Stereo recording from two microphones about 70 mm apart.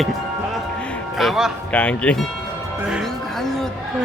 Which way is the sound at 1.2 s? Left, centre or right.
Centre.